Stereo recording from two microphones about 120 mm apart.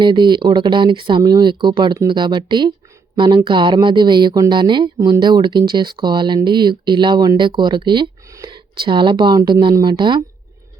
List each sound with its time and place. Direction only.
0.0 s speech: 40° right (ahead or behind)